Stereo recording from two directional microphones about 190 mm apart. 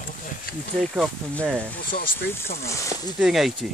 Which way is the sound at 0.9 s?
Centre (ahead or behind).